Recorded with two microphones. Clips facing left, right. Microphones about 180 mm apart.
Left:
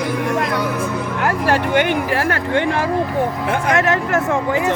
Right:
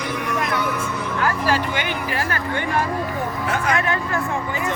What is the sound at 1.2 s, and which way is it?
Music, 65° left (ahead or behind).